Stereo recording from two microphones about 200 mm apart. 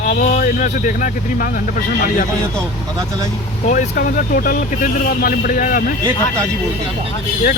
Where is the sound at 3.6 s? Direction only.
40° left (ahead or behind).